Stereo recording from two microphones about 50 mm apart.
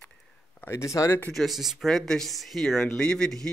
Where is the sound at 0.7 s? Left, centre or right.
Left.